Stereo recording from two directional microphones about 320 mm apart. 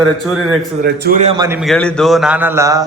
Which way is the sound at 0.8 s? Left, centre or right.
Right.